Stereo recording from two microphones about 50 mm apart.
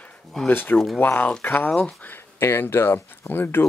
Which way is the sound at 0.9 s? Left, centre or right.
Left.